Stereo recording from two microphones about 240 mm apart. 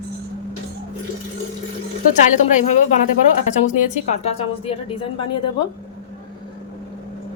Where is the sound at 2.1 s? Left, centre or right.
Left.